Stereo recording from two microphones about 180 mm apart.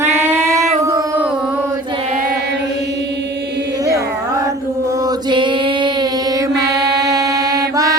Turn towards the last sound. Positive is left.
turn(degrees=-20)  # may be behind; listen again after turning